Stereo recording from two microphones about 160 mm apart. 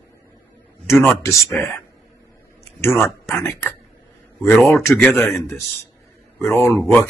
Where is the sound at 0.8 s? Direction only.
15° left (ahead or behind).